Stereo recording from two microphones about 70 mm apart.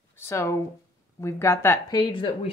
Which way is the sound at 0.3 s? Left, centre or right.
Left.